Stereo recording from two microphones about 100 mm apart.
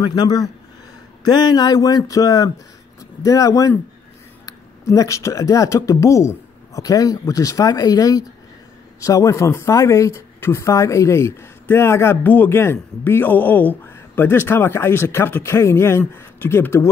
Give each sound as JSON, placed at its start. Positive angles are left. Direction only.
{"t": 0.0, "sound": "a man's voice", "side_deg": 50}